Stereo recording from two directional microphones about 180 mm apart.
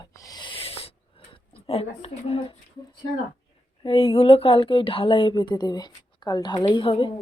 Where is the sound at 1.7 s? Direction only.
35° left (ahead or behind).